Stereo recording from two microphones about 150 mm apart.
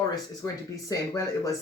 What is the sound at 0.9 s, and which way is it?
Speech, 20° left (ahead or behind).